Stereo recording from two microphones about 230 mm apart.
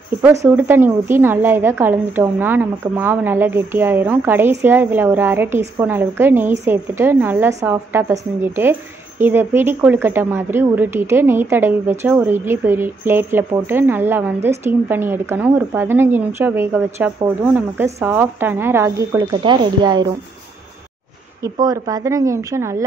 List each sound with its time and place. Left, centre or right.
0.2 s a woman's voice: centre
21.4 s a woman's voice: centre